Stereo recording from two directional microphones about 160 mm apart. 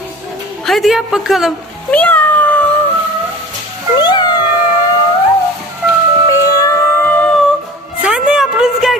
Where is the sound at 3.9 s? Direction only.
25° left (ahead or behind).